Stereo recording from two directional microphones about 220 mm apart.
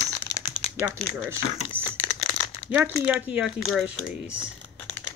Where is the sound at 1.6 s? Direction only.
25° left (ahead or behind).